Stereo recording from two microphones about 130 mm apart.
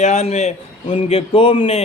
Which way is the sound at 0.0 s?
60° left (ahead or behind).